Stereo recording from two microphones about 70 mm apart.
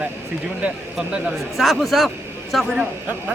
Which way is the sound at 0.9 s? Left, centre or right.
Centre.